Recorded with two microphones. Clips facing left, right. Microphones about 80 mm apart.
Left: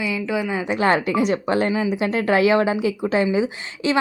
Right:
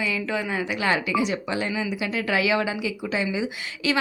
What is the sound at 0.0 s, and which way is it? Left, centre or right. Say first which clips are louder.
Speech: left 3 dB; centre.